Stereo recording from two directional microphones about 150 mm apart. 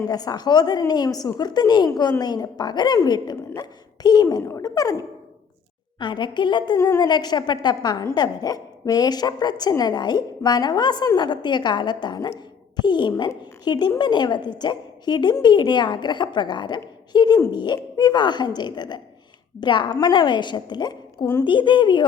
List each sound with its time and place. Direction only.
0.1 s a woman's voice: 25° left (ahead or behind)
6.0 s a woman's voice: 30° left (ahead or behind)